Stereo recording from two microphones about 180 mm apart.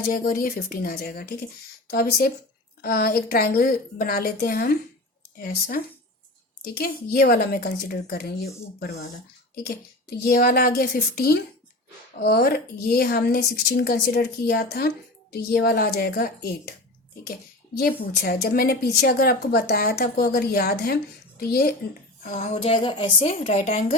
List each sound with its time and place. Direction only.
0.1 s a woman's voice: 55° left (ahead or behind)
10.2 s a woman's voice: 60° left (ahead or behind)
17.7 s a woman's voice: 60° left (ahead or behind)
22.2 s a woman's voice: 40° left (ahead or behind)